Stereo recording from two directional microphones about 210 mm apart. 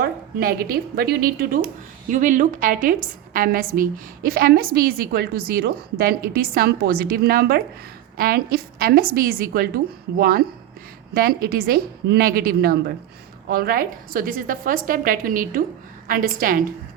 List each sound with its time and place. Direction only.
0.0 s a woman's voice: 45° right (ahead or behind)